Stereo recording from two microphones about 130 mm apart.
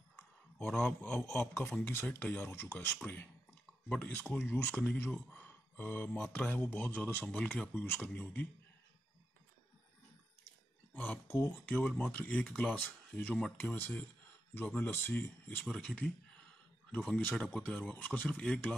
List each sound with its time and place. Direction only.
0.6 s speech: 10° left (ahead or behind)
11.0 s speech: 15° left (ahead or behind)
15.6 s speech: 5° left (ahead or behind)
17.2 s speech: 10° left (ahead or behind)